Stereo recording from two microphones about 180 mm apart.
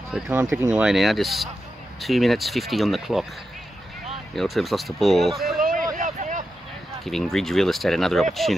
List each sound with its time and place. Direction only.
0.1 s speech: 10° right (ahead or behind)
4.4 s speech: centre (ahead or behind)
5.6 s a sound: 50° right (ahead or behind)
5.9 s vehicle: 45° right (ahead or behind)
7.1 s speech: centre (ahead or behind)